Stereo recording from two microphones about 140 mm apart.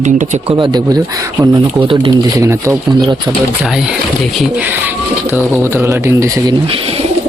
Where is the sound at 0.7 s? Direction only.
30° right (ahead or behind).